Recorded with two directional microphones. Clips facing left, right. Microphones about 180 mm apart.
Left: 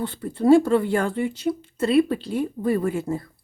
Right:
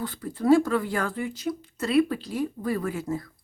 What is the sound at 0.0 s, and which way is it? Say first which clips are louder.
Speech: left 5 dB; 30° left (ahead or behind).